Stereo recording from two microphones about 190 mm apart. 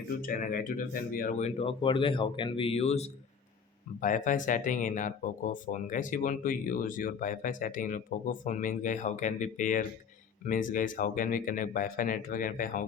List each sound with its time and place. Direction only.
0.2 s speech: 45° left (ahead or behind)